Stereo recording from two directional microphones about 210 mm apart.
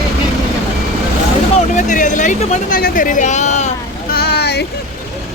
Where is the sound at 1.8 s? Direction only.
35° left (ahead or behind).